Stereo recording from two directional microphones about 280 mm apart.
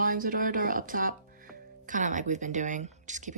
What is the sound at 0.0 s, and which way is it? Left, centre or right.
Speech, right.